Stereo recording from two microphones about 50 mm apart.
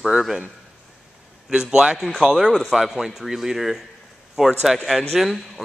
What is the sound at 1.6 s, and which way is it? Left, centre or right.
Speech, centre.